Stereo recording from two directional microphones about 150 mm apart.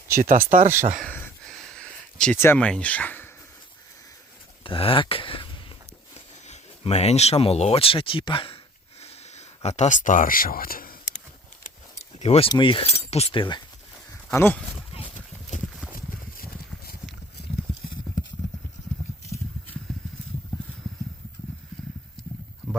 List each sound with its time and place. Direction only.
0.2 s speech: 65° right (ahead or behind)
1.5 s a sound: 5° left (ahead or behind)
2.4 s speech: 10° left (ahead or behind)
4.6 s speech: 35° left (ahead or behind)
9.0 s sniff: 45° left (ahead or behind)
9.6 s speech: 50° left (ahead or behind); by 10.9 s 75° left (ahead or behind)
12.2 s speech: 45° left (ahead or behind)
12.5 s speech: 35° left (ahead or behind)
14.3 s speech: 10° left (ahead or behind)
15.1 s clip-clop: 55° left (ahead or behind)
16.4 s horse: 85° left